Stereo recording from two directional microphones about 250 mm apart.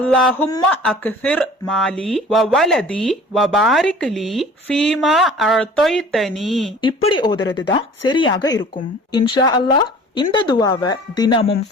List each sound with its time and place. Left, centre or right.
0.0 s speech: centre
6.8 s a woman's voice: centre